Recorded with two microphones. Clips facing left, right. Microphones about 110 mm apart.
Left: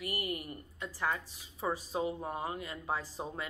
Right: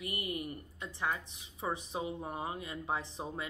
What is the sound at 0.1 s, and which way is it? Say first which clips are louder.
Speech: left 2 dB; 35° left (ahead or behind).